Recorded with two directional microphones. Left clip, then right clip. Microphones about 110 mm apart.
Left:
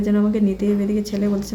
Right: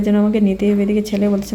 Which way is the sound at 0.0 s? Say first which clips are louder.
Right 4 dB; 25° right (ahead or behind).